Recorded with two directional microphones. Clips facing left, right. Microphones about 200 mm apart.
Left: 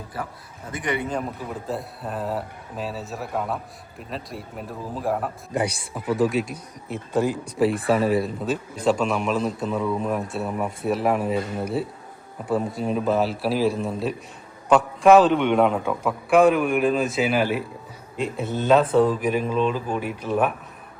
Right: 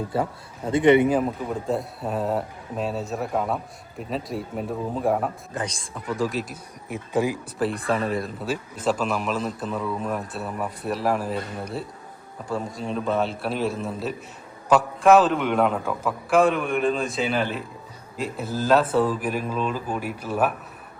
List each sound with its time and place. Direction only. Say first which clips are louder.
0.1 s speech: right 5 dB; 25° right (ahead or behind)
1.1 s speech: right 5 dB; centre (ahead or behind)
6.8 s speech: left 1 dB; 15° right (ahead or behind)
7.6 s speech: left 4 dB; centre (ahead or behind)
12.5 s speech: left 5 dB; centre (ahead or behind)